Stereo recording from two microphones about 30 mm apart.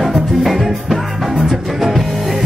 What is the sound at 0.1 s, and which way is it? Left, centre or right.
Music, centre.